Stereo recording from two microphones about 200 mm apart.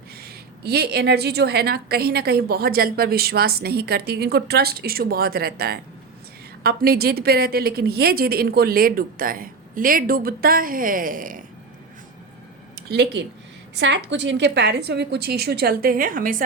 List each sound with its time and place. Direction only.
0.2 s a woman's voice: 50° right (ahead or behind)
12.7 s a woman's voice: 55° right (ahead or behind)